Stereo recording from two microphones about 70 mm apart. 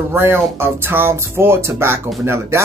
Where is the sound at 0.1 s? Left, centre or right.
Right.